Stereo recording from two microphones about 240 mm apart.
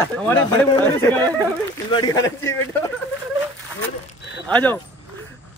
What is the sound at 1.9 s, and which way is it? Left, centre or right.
Speech, centre.